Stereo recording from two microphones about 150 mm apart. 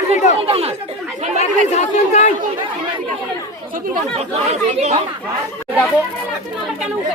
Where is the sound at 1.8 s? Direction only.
45° left (ahead or behind).